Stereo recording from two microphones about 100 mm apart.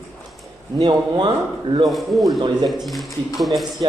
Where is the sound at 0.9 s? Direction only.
50° right (ahead or behind).